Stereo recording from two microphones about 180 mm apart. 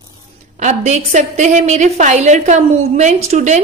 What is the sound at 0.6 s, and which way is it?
A woman's voice, 40° right (ahead or behind).